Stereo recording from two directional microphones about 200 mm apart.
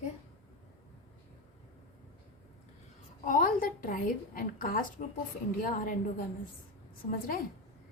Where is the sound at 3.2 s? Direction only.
45° left (ahead or behind).